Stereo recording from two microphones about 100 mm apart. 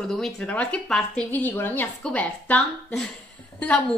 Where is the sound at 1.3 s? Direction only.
20° left (ahead or behind).